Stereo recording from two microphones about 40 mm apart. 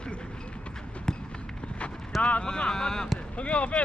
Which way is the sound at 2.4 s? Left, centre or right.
Left.